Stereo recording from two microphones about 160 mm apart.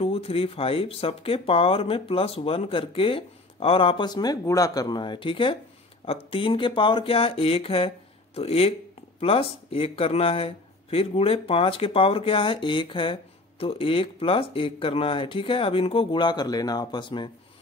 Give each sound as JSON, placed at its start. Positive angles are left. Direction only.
{"t": 0.0, "sound": "speech", "side_deg": 35}